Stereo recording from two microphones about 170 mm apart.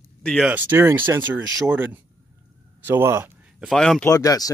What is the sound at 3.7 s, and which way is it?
Speech, 5° left (ahead or behind).